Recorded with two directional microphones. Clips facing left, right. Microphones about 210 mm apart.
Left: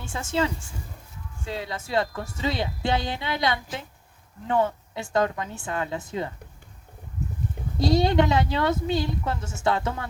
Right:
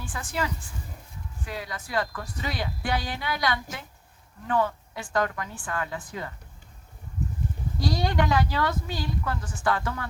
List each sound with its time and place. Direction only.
0.0 s speech: 25° left (ahead or behind)
7.8 s speech: 20° left (ahead or behind)